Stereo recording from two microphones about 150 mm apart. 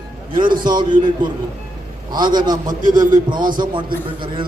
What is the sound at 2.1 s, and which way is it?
A man's voice, 30° right (ahead or behind).